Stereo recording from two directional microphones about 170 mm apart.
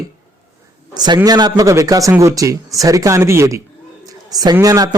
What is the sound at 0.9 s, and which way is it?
A man's voice, 25° right (ahead or behind).